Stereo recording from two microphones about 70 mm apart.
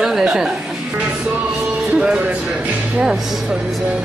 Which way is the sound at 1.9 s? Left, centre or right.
Centre.